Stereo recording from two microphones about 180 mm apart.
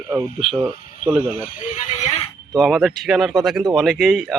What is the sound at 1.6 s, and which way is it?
Speech, 40° left (ahead or behind).